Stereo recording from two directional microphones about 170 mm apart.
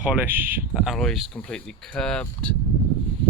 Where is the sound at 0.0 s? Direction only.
10° right (ahead or behind); by 2.6 s 5° left (ahead or behind).